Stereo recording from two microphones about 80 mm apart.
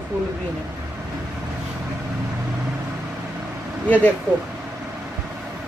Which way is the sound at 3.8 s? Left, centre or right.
Left.